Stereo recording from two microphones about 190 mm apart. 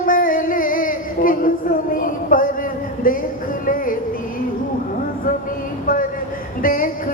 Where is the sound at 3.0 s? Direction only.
45° left (ahead or behind).